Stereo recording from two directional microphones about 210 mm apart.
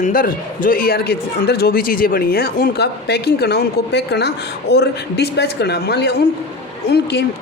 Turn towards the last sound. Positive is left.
turn(degrees=50)  # may be behind; listen again after turning